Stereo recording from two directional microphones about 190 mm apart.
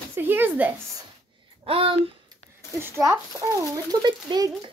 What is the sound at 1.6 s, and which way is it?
Speech, 30° right (ahead or behind).